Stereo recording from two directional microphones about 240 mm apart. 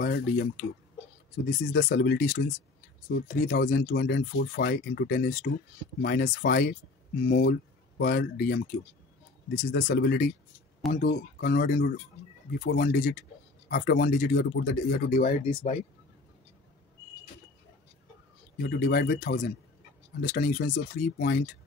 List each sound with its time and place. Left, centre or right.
0.0 s speech: left
1.6 s speech: left
9.5 s speech: left
15.5 s speech: left
18.7 s speech: left